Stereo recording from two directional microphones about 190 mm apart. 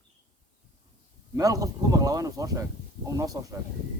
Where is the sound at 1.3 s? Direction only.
20° right (ahead or behind).